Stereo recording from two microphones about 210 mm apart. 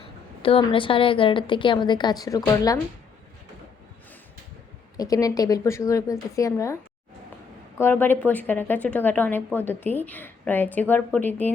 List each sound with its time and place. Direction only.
0.4 s a woman's voice: 25° left (ahead or behind)
4.9 s a woman's voice: 15° left (ahead or behind)
7.8 s a woman's voice: 10° left (ahead or behind)